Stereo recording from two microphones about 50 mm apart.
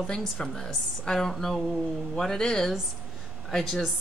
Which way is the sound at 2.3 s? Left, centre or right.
Centre.